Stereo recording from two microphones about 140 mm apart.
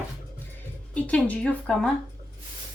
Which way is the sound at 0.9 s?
10° left (ahead or behind).